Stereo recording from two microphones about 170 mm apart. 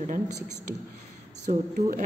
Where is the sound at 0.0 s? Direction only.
45° right (ahead or behind).